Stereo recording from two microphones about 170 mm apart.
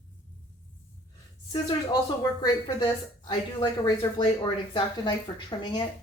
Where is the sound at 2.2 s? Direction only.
25° left (ahead or behind).